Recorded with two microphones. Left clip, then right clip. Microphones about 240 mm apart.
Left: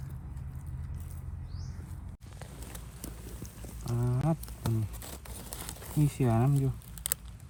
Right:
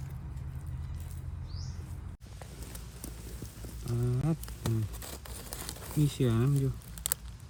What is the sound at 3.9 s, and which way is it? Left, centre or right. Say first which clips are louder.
Speech: left 2 dB; centre.